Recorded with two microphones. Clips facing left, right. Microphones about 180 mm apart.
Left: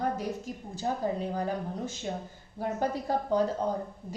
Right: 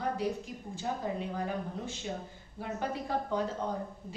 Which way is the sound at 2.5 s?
40° left (ahead or behind).